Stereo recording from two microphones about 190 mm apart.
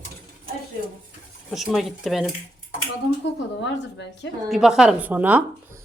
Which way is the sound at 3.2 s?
70° left (ahead or behind).